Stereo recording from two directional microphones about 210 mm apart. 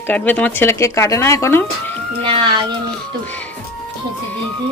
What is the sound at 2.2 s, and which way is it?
Speech, 25° right (ahead or behind).